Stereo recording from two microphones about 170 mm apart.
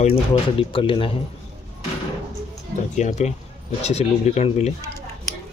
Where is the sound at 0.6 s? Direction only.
30° left (ahead or behind).